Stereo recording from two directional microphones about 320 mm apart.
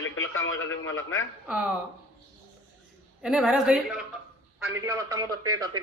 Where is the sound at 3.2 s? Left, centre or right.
Centre.